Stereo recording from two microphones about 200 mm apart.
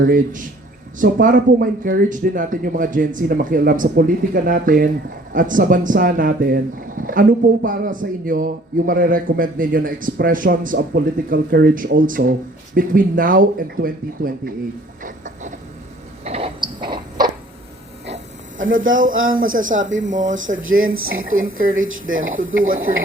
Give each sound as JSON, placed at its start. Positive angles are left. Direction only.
{"t": 0.0, "sound": "speech", "side_deg": -45}
{"t": 15.0, "sound": "a sound", "side_deg": -40}
{"t": 18.0, "sound": "a sound", "side_deg": -35}
{"t": 18.8, "sound": "speech", "side_deg": -75}
{"t": 19.5, "sound": "speech", "side_deg": -40}
{"t": 19.8, "sound": "speech", "side_deg": -70}
{"t": 20.1, "sound": "speech", "side_deg": -40}
{"t": 20.3, "sound": "speech", "side_deg": -75}